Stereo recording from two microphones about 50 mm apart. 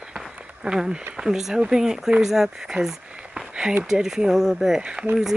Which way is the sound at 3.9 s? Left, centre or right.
Centre.